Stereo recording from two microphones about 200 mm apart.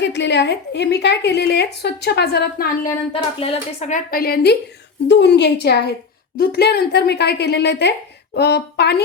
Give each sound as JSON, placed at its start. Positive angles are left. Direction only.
{"t": 0.0, "sound": "a woman's voice", "side_deg": 60}
{"t": 3.1, "sound": "a woman's voice", "side_deg": 30}